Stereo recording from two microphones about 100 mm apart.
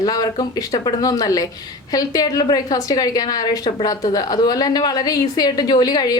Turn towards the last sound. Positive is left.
turn(degrees=40)  # may be behind; listen again after turning